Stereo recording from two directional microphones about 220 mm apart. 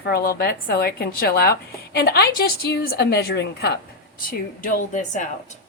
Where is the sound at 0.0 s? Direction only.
45° left (ahead or behind).